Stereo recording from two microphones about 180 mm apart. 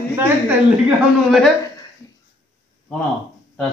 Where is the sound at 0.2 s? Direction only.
10° right (ahead or behind).